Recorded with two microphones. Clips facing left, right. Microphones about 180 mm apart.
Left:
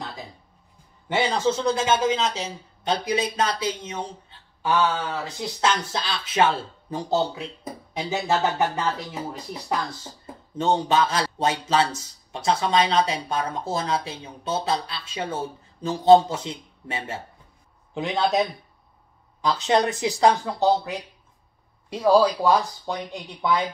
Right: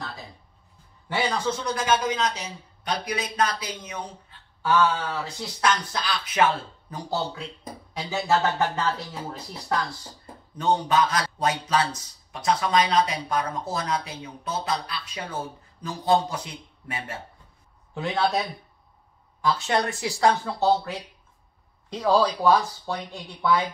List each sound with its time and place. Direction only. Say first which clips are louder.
1.0 s a man's voice: left 4 dB; 25° left (ahead or behind)
10.6 s a man's voice: left 1 dB; 25° left (ahead or behind)
19.4 s a man's voice: left 3 dB; 20° left (ahead or behind)